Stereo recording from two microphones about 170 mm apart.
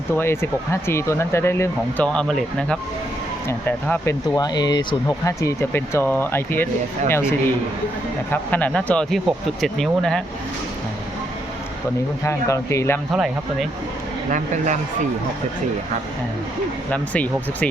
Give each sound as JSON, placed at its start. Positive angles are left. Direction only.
{"t": 0.2, "sound": "speech", "side_deg": 15}
{"t": 4.4, "sound": "speech", "side_deg": 25}
{"t": 12.2, "sound": "speech", "side_deg": 15}
{"t": 13.1, "sound": "speech", "side_deg": 0}
{"t": 14.3, "sound": "speech", "side_deg": -50}
{"t": 16.9, "sound": "speech", "side_deg": 10}